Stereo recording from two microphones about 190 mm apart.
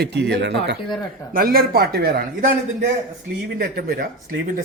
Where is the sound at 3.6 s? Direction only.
55° right (ahead or behind).